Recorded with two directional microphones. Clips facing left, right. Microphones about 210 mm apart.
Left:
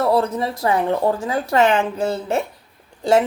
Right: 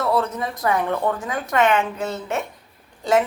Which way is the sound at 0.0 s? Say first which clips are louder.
Left 4 dB; 35° left (ahead or behind).